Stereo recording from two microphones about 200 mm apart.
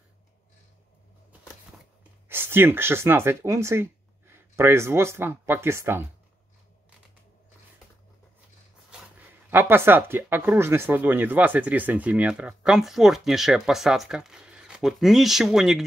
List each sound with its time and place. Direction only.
2.2 s speech: 10° right (ahead or behind)
9.5 s speech: 10° right (ahead or behind)